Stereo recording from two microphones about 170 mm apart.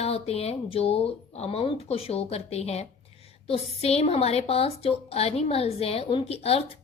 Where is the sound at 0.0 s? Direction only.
35° left (ahead or behind).